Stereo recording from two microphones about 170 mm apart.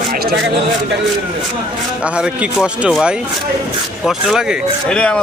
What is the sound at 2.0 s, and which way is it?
A man's voice, 5° right (ahead or behind).